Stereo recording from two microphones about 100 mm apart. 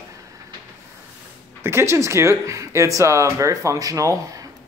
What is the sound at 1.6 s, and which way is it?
Speech, 25° right (ahead or behind).